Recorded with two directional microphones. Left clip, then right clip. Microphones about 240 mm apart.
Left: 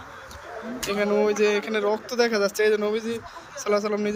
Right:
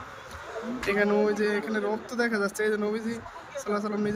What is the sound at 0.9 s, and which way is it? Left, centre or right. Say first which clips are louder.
Speech: left 2 dB; centre.